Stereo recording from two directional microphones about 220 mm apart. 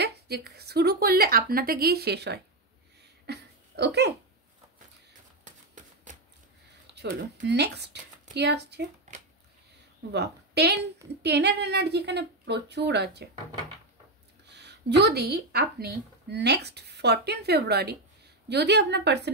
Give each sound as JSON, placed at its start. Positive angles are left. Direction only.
{"t": 0.0, "sound": "a woman's voice", "side_deg": -45}
{"t": 3.3, "sound": "a sound", "side_deg": -50}
{"t": 6.9, "sound": "speech", "side_deg": -45}
{"t": 9.1, "sound": "a sound", "side_deg": -35}
{"t": 10.1, "sound": "a woman's voice", "side_deg": -50}
{"t": 14.4, "sound": "a woman's voice", "side_deg": -50}